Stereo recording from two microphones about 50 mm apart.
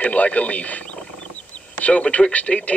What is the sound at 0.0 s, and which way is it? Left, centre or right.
Speech, left.